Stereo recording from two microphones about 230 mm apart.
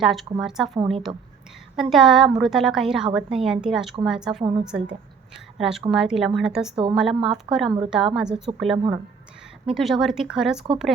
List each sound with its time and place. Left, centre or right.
0.0 s a woman's voice: centre